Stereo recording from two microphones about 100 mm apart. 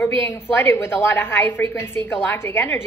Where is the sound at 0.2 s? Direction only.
25° left (ahead or behind).